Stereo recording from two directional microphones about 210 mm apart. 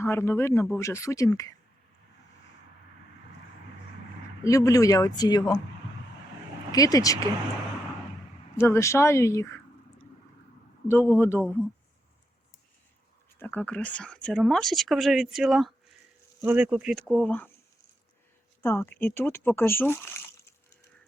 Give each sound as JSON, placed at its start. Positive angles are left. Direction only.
{"t": 0.0, "sound": "speech", "side_deg": 10}
{"t": 4.4, "sound": "speech", "side_deg": 15}
{"t": 6.7, "sound": "speech", "side_deg": 15}
{"t": 8.5, "sound": "speech", "side_deg": 10}
{"t": 10.8, "sound": "speech", "side_deg": 10}
{"t": 13.4, "sound": "speech", "side_deg": 10}
{"t": 18.6, "sound": "speech", "side_deg": 10}